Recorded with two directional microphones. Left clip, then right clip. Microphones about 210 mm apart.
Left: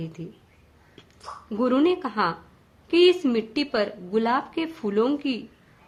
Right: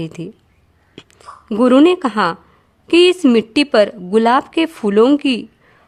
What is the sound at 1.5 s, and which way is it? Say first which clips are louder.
A woman's voice: right 11 dB; 55° right (ahead or behind).